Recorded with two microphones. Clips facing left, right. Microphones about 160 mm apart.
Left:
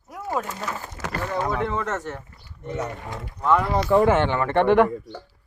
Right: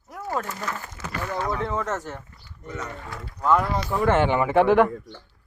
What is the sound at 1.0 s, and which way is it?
Speech, 40° left (ahead or behind).